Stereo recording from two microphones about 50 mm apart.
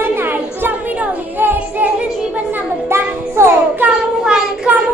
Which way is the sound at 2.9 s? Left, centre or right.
Right.